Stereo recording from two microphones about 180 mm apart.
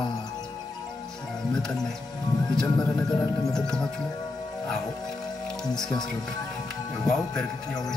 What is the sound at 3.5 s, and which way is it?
Speech, 5° left (ahead or behind).